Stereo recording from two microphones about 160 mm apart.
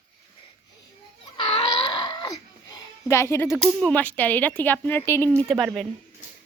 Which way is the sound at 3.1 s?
15° left (ahead or behind).